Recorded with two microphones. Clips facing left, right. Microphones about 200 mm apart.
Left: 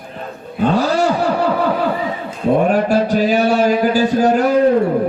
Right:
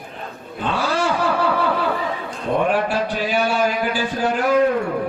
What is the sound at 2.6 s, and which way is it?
Mantra, 40° left (ahead or behind).